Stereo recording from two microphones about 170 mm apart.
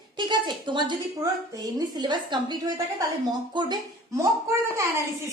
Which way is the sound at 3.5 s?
25° right (ahead or behind).